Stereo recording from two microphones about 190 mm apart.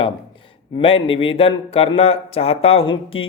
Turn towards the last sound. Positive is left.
turn(degrees=30)  # may be behind; listen again after turning